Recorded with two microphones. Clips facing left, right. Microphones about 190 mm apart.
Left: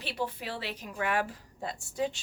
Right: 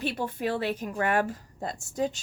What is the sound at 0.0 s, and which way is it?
A woman's voice, 50° right (ahead or behind).